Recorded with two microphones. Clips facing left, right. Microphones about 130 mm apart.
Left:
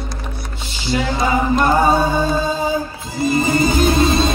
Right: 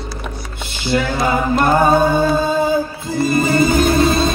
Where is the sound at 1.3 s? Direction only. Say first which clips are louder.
Right 1 dB; 50° right (ahead or behind).